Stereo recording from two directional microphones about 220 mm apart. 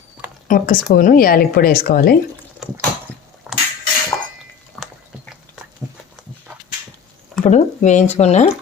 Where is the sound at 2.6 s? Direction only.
Centre (ahead or behind).